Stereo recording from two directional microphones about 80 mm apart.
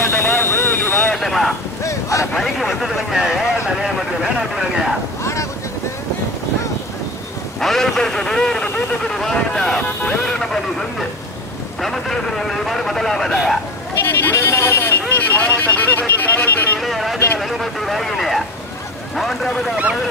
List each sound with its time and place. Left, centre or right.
0.1 s vehicle: left
1.1 s vehicle: centre
1.8 s a sound: left
2.3 s speech: centre
5.2 s boat: left
7.6 s speech: centre
13.9 s speech: left
16.8 s speech: centre